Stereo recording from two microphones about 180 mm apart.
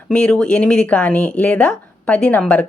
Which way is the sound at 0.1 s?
5° left (ahead or behind).